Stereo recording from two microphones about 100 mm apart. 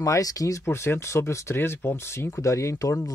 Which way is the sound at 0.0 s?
35° left (ahead or behind).